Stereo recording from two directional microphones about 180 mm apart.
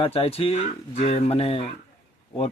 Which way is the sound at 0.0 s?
35° left (ahead or behind).